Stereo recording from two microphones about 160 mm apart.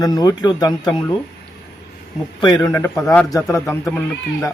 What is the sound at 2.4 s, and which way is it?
Speech, 25° left (ahead or behind).